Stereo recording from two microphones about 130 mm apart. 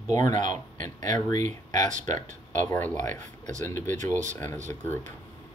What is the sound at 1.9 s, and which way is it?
Speech, 70° right (ahead or behind).